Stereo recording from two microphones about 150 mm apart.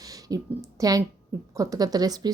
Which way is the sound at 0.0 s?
25° right (ahead or behind).